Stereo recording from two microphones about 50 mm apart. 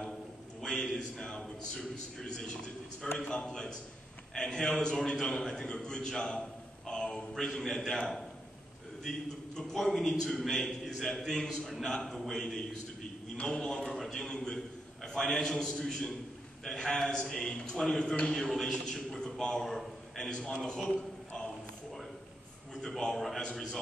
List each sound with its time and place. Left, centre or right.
0.6 s a man's voice: centre
9.8 s a man's voice: centre
14.3 s a man's voice: centre
19.6 s a man's voice: centre
20.2 s a man's voice: centre
22.8 s a man's voice: centre